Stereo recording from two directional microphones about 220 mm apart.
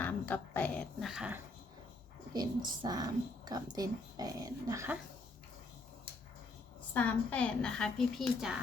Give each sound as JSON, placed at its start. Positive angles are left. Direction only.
{"t": 0.0, "sound": "a sound", "side_deg": 5}
{"t": 2.3, "sound": "a woman's voice", "side_deg": -20}
{"t": 6.9, "sound": "a woman's voice", "side_deg": 5}